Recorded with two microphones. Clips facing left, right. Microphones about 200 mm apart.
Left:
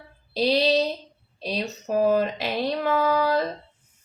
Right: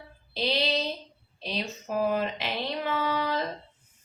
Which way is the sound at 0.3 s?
40° left (ahead or behind).